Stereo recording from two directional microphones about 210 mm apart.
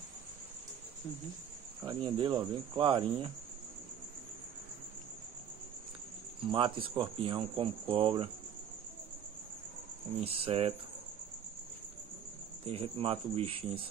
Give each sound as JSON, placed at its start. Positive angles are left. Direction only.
{"t": 1.8, "sound": "speech", "side_deg": -25}
{"t": 6.4, "sound": "speech", "side_deg": -25}
{"t": 10.2, "sound": "speech", "side_deg": -25}
{"t": 12.6, "sound": "speech", "side_deg": -25}